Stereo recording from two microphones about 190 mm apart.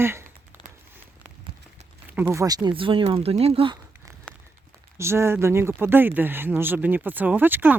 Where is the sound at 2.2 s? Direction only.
15° right (ahead or behind).